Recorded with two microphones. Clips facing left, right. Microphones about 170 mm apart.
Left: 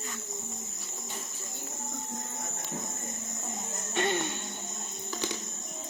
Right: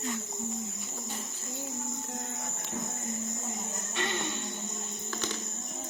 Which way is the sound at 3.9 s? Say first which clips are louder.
Left 6 dB; 45° left (ahead or behind).